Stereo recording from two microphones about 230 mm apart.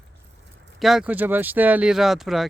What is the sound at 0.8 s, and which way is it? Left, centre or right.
Speech, centre.